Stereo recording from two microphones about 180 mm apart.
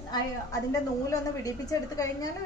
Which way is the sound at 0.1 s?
20° left (ahead or behind).